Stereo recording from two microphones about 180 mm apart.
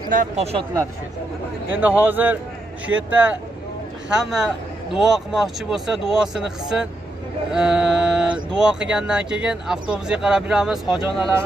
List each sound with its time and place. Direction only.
0.1 s speech: 40° right (ahead or behind)
1.7 s a man's voice: 10° right (ahead or behind)